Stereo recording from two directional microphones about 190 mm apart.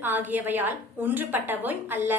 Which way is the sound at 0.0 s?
10° right (ahead or behind).